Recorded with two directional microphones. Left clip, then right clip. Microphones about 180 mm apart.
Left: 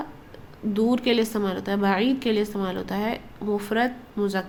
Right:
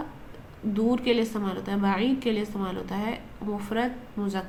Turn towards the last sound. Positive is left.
turn(degrees=35)  # may be behind; listen again after turning